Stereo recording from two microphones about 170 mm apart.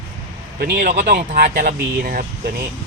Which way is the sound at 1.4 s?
65° right (ahead or behind).